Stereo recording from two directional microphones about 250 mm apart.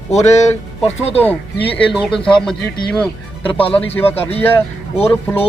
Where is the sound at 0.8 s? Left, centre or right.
Left.